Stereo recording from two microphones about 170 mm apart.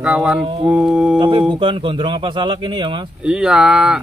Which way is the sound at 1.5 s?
30° right (ahead or behind).